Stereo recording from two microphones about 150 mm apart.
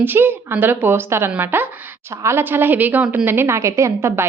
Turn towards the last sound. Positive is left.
turn(degrees=-15)  # may be behind; listen again after turning